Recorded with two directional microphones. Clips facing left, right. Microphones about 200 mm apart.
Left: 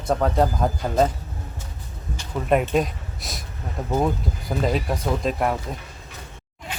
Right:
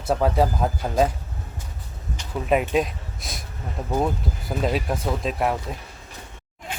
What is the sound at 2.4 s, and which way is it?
Speech, centre (ahead or behind).